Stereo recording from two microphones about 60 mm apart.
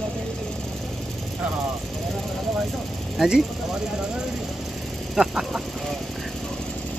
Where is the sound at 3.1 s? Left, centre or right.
Centre.